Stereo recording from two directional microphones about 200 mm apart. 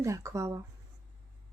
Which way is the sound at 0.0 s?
15° right (ahead or behind).